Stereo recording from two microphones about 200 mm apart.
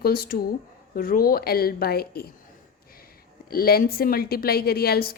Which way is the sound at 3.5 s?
50° left (ahead or behind).